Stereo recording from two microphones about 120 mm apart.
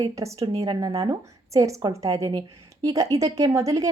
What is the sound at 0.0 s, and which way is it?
A woman's voice, 25° right (ahead or behind).